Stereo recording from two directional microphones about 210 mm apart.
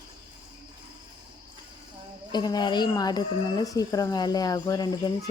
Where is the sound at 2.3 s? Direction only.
20° left (ahead or behind).